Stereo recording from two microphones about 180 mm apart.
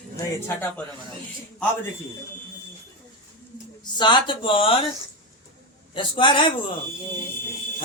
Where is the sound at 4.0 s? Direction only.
25° left (ahead or behind).